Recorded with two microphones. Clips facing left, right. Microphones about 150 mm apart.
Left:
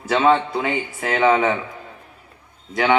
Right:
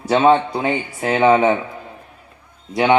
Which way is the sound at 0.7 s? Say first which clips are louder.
Right 3 dB; 30° right (ahead or behind).